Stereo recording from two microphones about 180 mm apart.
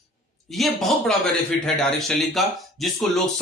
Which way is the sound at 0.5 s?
Centre (ahead or behind).